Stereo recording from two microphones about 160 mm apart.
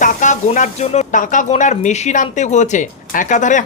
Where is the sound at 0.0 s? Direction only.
50° left (ahead or behind).